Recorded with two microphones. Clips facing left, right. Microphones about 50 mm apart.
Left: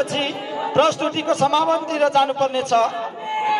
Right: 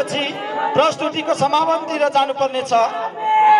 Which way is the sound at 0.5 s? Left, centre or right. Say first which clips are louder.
Right 2 dB; right.